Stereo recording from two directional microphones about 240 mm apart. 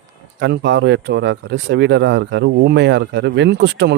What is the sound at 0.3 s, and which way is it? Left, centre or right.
Speech, right.